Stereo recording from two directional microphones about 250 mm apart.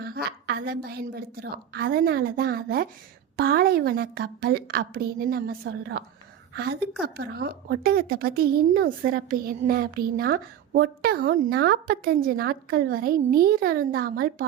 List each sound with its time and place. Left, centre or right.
0.0 s a woman's voice: right
7.2 s a woman's voice: right